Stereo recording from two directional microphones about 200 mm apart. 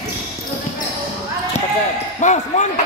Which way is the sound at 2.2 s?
35° left (ahead or behind).